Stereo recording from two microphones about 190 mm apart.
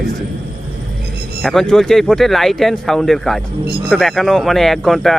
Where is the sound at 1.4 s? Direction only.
5° left (ahead or behind).